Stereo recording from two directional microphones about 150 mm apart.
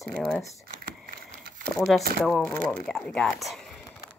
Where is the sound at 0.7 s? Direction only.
70° right (ahead or behind).